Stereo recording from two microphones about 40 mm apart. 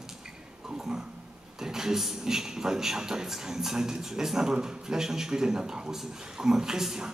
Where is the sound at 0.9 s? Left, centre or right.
Centre.